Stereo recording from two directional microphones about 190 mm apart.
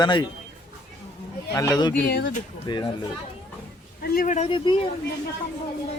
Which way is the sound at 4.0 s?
50° left (ahead or behind).